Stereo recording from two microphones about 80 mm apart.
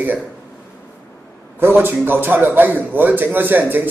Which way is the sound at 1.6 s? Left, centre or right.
Right.